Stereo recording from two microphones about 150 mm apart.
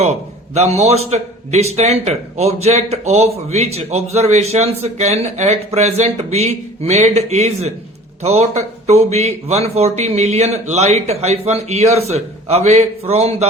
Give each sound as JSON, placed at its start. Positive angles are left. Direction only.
{"t": 0.5, "sound": "a man's voice", "side_deg": -45}